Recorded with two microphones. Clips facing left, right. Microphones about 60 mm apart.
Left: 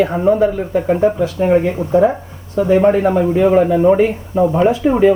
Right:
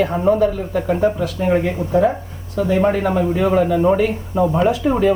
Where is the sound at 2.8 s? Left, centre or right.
Centre.